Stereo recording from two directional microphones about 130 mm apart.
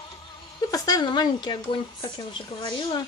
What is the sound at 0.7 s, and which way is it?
Speech, 30° left (ahead or behind).